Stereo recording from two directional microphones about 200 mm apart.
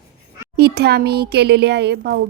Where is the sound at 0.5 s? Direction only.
55° right (ahead or behind).